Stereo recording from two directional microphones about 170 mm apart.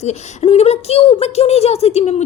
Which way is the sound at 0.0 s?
40° left (ahead or behind).